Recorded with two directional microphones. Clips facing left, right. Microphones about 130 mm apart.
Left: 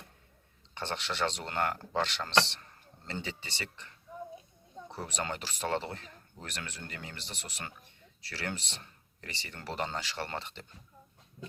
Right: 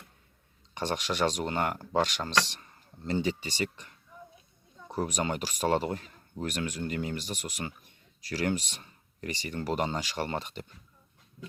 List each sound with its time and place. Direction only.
0.7 s speech: 15° right (ahead or behind)
5.0 s speech: 15° right (ahead or behind)